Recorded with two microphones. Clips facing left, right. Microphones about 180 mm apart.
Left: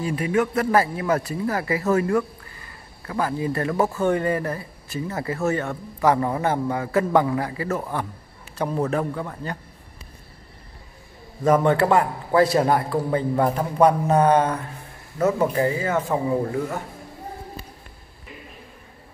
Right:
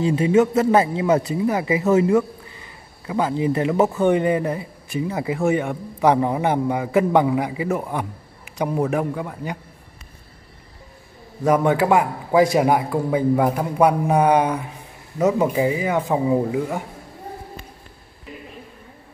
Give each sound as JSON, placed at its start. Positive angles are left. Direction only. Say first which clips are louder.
{"t": 0.0, "sound": "speech", "louder": "right 6 dB", "side_deg": -25}
{"t": 11.4, "sound": "speech", "louder": "right 1 dB", "side_deg": -10}